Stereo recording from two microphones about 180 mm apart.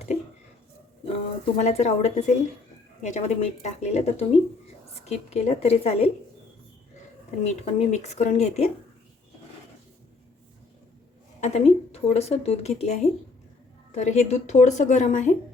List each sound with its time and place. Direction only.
1.5 s a woman's voice: 40° left (ahead or behind)
7.3 s a woman's voice: 40° left (ahead or behind)
11.3 s a woman's voice: 40° left (ahead or behind)